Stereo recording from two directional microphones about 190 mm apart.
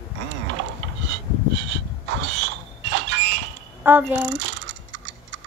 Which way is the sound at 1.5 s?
70° right (ahead or behind).